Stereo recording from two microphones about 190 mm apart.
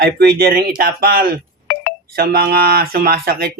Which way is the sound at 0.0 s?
55° right (ahead or behind).